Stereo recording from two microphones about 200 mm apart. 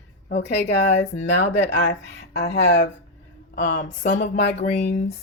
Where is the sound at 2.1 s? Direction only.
55° left (ahead or behind).